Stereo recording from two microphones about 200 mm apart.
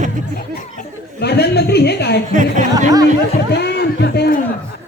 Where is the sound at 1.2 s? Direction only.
55° left (ahead or behind).